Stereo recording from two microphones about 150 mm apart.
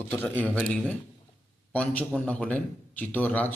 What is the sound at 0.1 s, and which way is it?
A man's voice, 10° left (ahead or behind).